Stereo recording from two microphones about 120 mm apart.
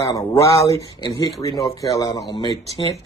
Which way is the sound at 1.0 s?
35° left (ahead or behind).